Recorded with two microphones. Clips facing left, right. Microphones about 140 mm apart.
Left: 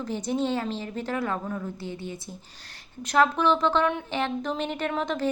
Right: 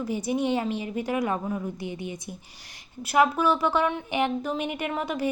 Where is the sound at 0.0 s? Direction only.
10° right (ahead or behind).